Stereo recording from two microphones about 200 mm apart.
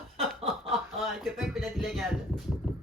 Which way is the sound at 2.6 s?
Centre (ahead or behind).